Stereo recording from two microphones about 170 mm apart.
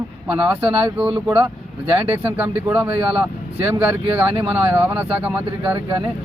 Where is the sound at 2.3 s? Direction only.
10° right (ahead or behind).